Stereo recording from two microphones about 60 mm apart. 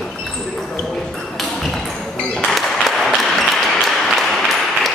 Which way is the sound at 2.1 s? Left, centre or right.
Centre.